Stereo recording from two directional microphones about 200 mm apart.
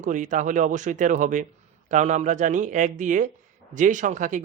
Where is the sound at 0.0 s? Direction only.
40° right (ahead or behind).